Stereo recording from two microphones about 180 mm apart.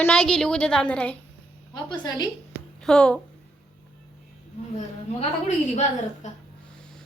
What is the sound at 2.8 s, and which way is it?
Speech, 5° left (ahead or behind).